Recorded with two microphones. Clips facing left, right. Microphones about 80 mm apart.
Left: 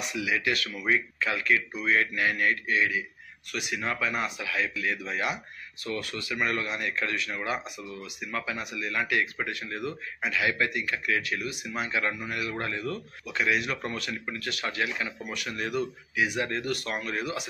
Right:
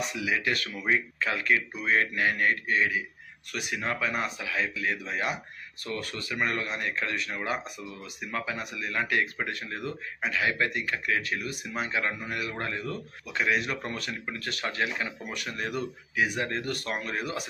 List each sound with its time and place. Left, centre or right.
0.0 s a man's voice: right